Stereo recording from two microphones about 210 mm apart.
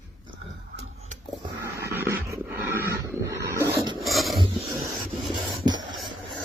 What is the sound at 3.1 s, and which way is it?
Wild animals, 10° right (ahead or behind).